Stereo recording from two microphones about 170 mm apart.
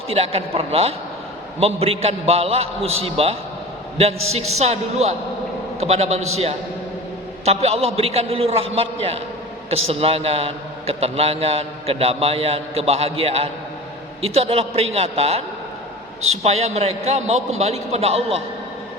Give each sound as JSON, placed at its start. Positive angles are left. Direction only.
{"t": 0.1, "sound": "a man's voice", "side_deg": -35}